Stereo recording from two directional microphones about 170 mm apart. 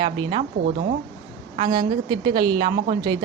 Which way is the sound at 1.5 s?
25° right (ahead or behind).